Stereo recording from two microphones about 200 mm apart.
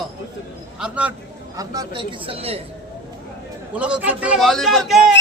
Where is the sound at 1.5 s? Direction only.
20° right (ahead or behind).